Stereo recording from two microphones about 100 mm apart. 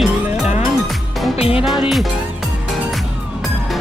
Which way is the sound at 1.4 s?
70° left (ahead or behind).